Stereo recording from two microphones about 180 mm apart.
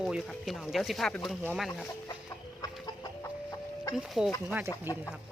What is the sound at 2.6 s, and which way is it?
Chicken, 20° left (ahead or behind).